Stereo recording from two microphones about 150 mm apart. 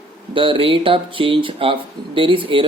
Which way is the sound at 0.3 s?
35° right (ahead or behind).